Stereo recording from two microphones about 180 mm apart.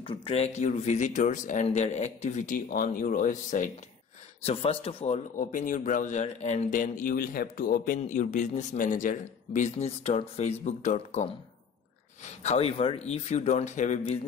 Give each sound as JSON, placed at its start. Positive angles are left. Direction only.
{"t": 0.0, "sound": "speech", "side_deg": 30}
{"t": 4.5, "sound": "a man's voice", "side_deg": 30}
{"t": 12.4, "sound": "speech", "side_deg": 35}